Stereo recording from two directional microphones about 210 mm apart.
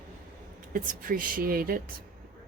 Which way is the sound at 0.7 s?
40° right (ahead or behind).